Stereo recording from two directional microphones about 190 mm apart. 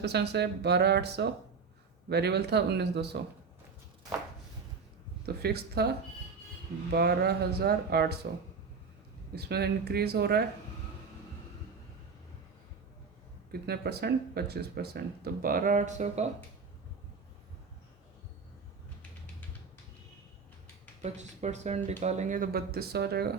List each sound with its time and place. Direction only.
0.0 s speech: 60° right (ahead or behind)
5.2 s speech: 55° right (ahead or behind)
6.9 s speech: 60° right (ahead or behind)
9.3 s speech: 55° right (ahead or behind)
13.5 s speech: 55° right (ahead or behind); by 16.3 s 35° right (ahead or behind)
21.0 s speech: 35° right (ahead or behind); by 23.3 s 55° right (ahead or behind)